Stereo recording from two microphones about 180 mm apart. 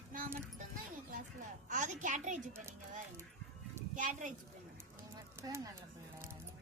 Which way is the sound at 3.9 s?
45° right (ahead or behind).